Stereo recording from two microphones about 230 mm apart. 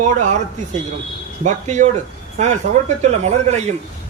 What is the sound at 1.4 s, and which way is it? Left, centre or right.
A man's voice, right.